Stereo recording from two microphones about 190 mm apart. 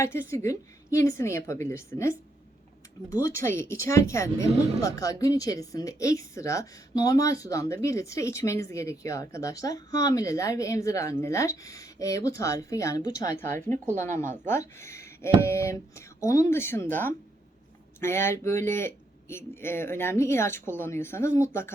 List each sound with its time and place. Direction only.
0.0 s speech: 15° left (ahead or behind)